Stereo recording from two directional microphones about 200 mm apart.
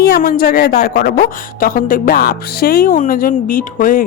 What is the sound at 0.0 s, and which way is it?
A woman's voice, 50° left (ahead or behind).